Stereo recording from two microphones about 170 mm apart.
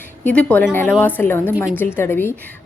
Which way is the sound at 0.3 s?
10° left (ahead or behind).